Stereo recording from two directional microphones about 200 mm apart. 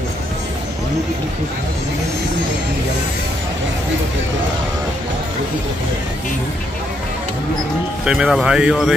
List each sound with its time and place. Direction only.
8.0 s speech: 5° right (ahead or behind)